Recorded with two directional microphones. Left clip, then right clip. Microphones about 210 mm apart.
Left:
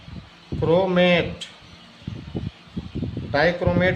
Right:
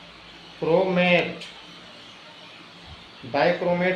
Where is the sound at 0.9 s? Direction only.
35° left (ahead or behind).